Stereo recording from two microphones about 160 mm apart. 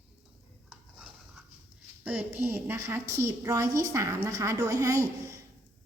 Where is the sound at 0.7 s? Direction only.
5° right (ahead or behind).